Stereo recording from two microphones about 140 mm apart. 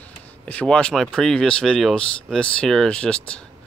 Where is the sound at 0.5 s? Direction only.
10° left (ahead or behind).